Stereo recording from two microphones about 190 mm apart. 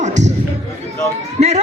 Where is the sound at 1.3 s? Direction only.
35° right (ahead or behind).